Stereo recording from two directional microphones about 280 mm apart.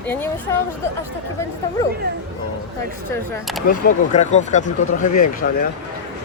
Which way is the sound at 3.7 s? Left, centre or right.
Left.